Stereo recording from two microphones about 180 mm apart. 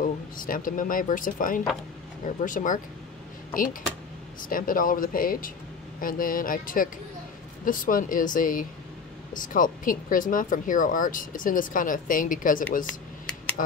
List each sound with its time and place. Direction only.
0.0 s speech: 50° left (ahead or behind)
4.4 s speech: 50° left (ahead or behind)